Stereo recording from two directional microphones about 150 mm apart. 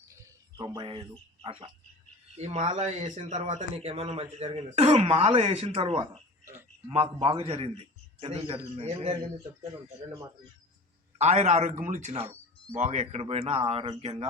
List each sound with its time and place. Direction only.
0.2 s speech: 25° right (ahead or behind); by 9.1 s 40° right (ahead or behind)
11.2 s speech: 45° right (ahead or behind)